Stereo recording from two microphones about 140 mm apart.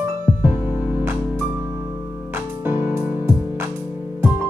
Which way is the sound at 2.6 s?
15° right (ahead or behind).